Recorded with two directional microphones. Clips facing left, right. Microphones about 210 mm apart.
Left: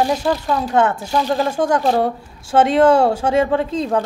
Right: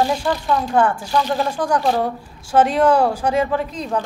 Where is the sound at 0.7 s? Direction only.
25° left (ahead or behind).